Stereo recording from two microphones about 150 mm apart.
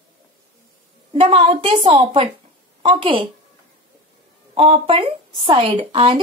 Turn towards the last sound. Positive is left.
turn(degrees=-40)  # may be behind; listen again after turning